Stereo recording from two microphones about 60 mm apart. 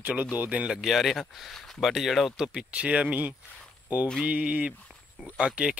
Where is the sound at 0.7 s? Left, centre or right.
Centre.